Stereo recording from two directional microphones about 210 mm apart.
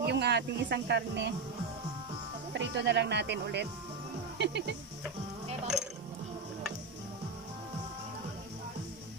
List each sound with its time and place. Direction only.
0.0 s speech: 50° right (ahead or behind)
2.5 s speech: 55° right (ahead or behind)